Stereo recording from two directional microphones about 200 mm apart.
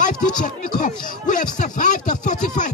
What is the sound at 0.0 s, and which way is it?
Music, 40° left (ahead or behind).